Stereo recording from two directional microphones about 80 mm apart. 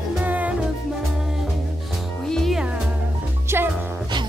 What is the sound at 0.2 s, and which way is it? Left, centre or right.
Music, centre.